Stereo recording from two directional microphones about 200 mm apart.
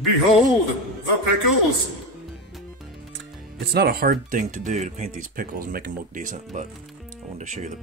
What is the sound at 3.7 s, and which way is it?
Speech, 50° right (ahead or behind).